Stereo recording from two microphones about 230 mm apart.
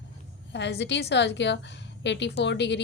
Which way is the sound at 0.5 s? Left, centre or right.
Left.